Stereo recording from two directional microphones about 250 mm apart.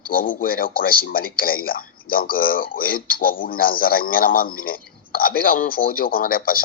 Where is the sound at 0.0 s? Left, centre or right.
Left.